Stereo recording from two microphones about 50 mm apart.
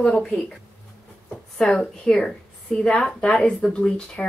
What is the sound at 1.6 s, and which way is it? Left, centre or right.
A woman's voice, centre.